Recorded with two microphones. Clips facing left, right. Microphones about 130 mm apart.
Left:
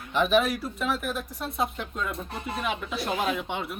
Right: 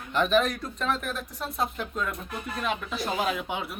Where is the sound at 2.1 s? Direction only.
30° left (ahead or behind).